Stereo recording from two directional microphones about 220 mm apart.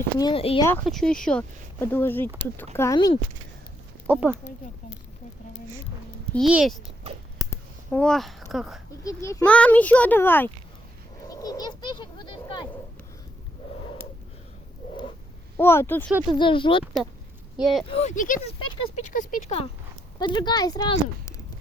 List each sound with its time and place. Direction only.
0.2 s speech: 20° left (ahead or behind)
0.9 s a child's voice: centre (ahead or behind)
4.0 s speech: 5° right (ahead or behind)
6.3 s speech: centre (ahead or behind)
7.9 s speech: 5° left (ahead or behind)
9.0 s a child's voice: 15° left (ahead or behind)
11.3 s a sound: 15° left (ahead or behind)
15.5 s a child's voice: 10° left (ahead or behind)
16.4 s speech: 20° left (ahead or behind)
16.8 s speech: 5° right (ahead or behind)
17.8 s speech: 30° left (ahead or behind)